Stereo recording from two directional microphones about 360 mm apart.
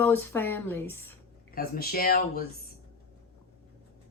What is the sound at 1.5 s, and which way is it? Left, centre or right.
Speech, left.